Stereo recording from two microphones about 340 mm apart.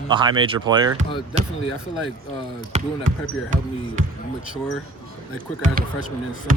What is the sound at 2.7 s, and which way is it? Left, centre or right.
Speech, centre.